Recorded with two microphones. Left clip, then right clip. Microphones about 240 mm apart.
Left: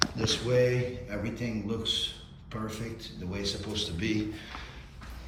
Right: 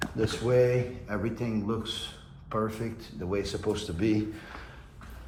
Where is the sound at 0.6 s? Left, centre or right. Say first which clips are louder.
Right 2 dB; right.